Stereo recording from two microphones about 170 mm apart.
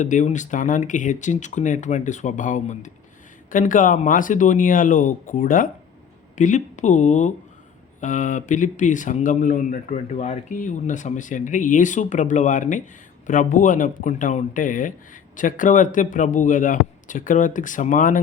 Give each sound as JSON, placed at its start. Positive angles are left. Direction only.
{"t": 0.0, "sound": "speech", "side_deg": 45}